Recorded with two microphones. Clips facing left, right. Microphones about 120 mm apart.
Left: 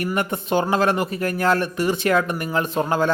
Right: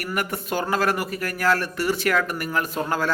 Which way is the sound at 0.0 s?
25° left (ahead or behind).